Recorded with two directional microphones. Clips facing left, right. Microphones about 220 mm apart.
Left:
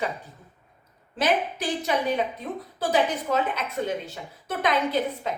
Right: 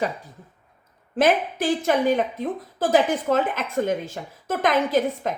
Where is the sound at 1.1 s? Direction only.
50° right (ahead or behind).